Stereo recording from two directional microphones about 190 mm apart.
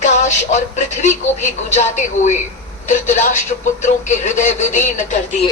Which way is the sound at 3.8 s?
40° left (ahead or behind).